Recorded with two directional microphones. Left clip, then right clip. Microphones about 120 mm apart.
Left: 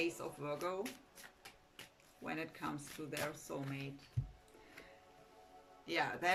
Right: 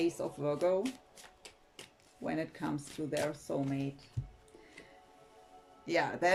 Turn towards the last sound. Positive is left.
turn(degrees=-50)  # may be behind; listen again after turning